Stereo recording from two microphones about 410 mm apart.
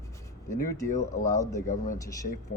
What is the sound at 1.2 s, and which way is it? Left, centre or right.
Speech, centre.